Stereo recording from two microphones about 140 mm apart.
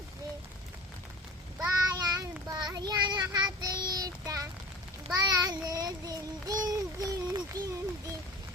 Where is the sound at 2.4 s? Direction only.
30° right (ahead or behind).